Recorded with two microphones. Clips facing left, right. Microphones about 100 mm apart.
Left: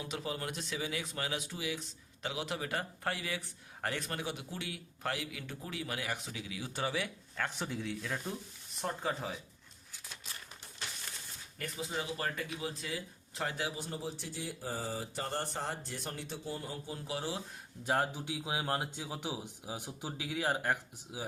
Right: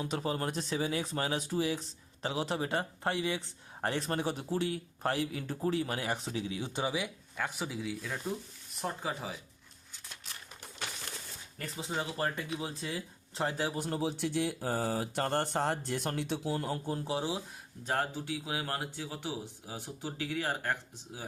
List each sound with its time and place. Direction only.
0.1 s speech: 40° right (ahead or behind); by 9.4 s centre (ahead or behind)
11.5 s speech: 30° right (ahead or behind)
13.7 s speech: 60° right (ahead or behind)
17.1 s speech: 20° right (ahead or behind)
17.8 s speech: 15° left (ahead or behind)